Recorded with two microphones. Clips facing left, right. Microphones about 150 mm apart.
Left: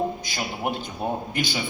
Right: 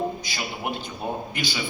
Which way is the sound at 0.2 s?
50° left (ahead or behind).